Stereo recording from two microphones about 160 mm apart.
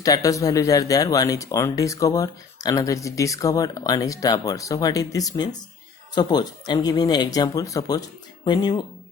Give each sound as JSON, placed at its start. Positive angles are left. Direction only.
{"t": 0.0, "sound": "speech", "side_deg": 20}